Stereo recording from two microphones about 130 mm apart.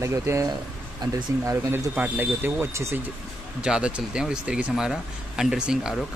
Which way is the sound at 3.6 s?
5° right (ahead or behind).